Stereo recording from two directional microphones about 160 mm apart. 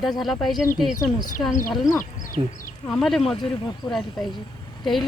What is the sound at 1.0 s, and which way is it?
Speech, 55° left (ahead or behind).